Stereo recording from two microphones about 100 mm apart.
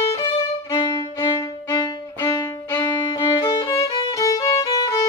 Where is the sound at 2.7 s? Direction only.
25° left (ahead or behind).